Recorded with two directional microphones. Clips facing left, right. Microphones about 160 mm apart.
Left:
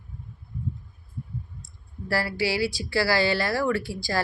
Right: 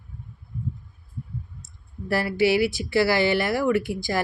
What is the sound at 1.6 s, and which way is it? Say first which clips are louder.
Speech: right 2 dB; 20° right (ahead or behind).